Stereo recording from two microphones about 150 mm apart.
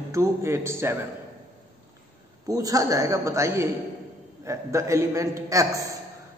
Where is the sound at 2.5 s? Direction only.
25° right (ahead or behind).